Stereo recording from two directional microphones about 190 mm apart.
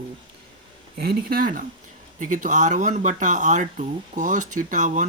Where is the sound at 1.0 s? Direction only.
55° right (ahead or behind).